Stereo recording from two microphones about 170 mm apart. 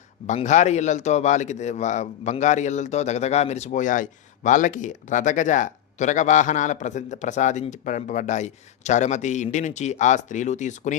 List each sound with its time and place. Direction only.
0.3 s a man's voice: 45° left (ahead or behind)